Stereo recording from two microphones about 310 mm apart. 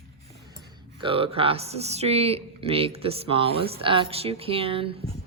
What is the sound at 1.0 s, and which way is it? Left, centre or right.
Speech, centre.